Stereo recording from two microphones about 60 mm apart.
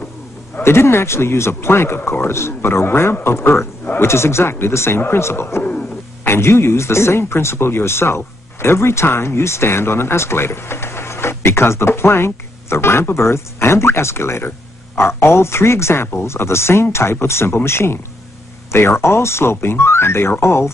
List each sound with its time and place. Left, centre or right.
0.6 s speech: left
5.6 s a sound: left
6.2 s speech: left